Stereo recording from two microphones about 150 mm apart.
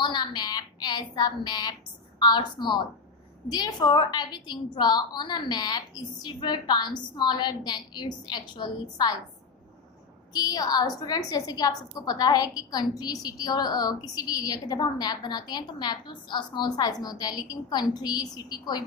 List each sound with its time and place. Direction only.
0.0 s a woman's voice: 30° left (ahead or behind)
10.3 s a woman's voice: 25° left (ahead or behind)